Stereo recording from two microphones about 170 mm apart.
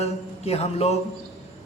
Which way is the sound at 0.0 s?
40° left (ahead or behind).